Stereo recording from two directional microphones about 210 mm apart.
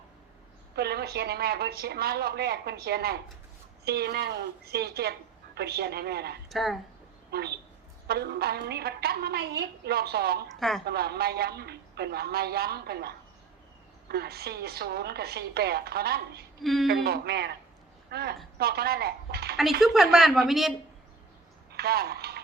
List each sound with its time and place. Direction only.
0.8 s a woman's voice: 50° right (ahead or behind)
6.5 s speech: centre (ahead or behind)
7.3 s a woman's voice: 50° right (ahead or behind)
10.6 s speech: centre (ahead or behind)
10.8 s a woman's voice: 50° right (ahead or behind)
19.8 s speech: centre (ahead or behind)
21.7 s speech: 50° right (ahead or behind)